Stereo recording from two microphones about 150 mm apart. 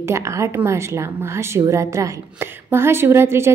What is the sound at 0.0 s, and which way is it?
A woman's voice, 20° right (ahead or behind).